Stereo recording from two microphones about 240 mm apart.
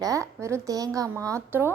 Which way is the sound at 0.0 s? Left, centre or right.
Centre.